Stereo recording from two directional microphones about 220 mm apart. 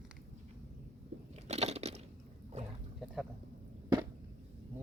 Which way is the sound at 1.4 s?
30° right (ahead or behind).